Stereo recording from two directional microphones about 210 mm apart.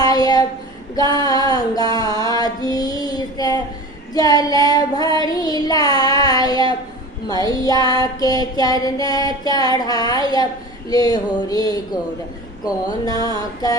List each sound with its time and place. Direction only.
0.0 s child singing: 20° left (ahead or behind)
0.9 s a sound: 20° left (ahead or behind)
4.1 s child singing: 20° left (ahead or behind)
7.3 s female singing: 15° left (ahead or behind)